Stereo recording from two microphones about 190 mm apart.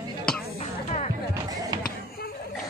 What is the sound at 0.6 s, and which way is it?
Music, 35° left (ahead or behind).